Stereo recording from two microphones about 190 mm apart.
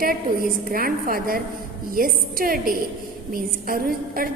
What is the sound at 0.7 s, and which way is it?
A woman's voice, 50° right (ahead or behind).